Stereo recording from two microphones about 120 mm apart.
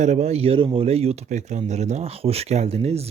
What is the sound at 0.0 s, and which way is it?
Speech, 65° right (ahead or behind).